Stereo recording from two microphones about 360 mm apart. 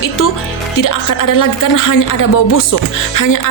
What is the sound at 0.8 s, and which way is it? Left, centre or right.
A woman's voice, left.